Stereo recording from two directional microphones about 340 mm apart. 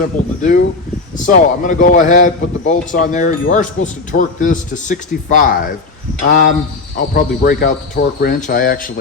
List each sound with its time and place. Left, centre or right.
0.0 s a man's voice: left